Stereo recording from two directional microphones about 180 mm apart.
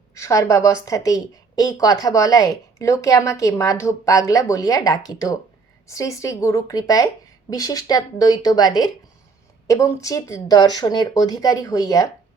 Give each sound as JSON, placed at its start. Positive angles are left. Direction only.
{"t": 0.1, "sound": "a woman's voice", "side_deg": 15}